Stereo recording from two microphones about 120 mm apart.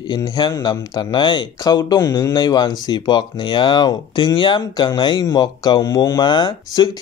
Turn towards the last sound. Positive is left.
turn(degrees=40)  # may be behind; listen again after turning